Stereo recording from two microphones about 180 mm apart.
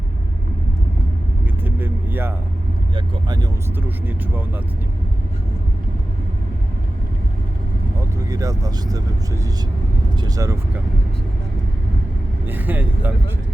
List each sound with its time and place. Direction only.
1.6 s vehicle: 10° right (ahead or behind)
2.9 s speech: 25° right (ahead or behind)
3.8 s speech: 10° right (ahead or behind)
7.9 s speech: 20° right (ahead or behind)
12.5 s speech: 10° right (ahead or behind)